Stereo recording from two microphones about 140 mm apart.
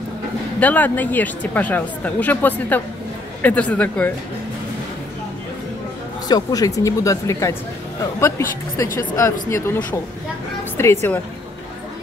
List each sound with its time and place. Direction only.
0.6 s speech: 10° left (ahead or behind)
6.2 s speech: 25° left (ahead or behind)